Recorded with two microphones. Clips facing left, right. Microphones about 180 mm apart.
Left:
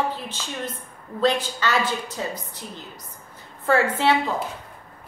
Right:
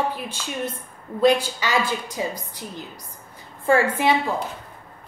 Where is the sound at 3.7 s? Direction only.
10° right (ahead or behind).